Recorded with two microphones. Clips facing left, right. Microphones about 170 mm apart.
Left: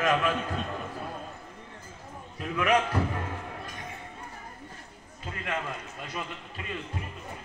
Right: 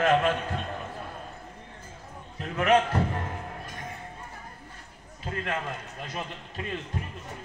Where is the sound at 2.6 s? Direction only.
35° right (ahead or behind).